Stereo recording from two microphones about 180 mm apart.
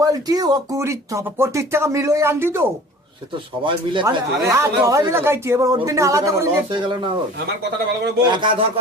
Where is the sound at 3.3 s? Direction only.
25° right (ahead or behind).